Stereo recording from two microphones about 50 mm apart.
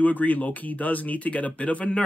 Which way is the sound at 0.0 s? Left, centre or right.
Left.